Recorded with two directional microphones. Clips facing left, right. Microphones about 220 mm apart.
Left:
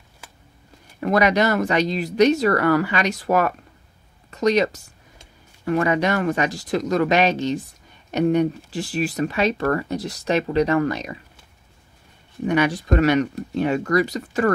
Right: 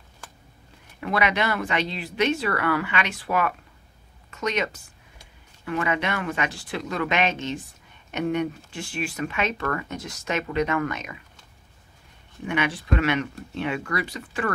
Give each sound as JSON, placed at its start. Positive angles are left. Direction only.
{"t": 1.0, "sound": "speech", "side_deg": 40}
{"t": 12.4, "sound": "speech", "side_deg": 40}